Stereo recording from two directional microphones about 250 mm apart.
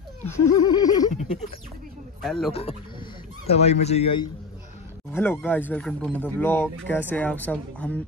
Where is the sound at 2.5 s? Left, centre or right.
Left.